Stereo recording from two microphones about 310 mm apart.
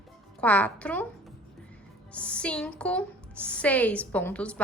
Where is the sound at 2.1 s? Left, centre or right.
Centre.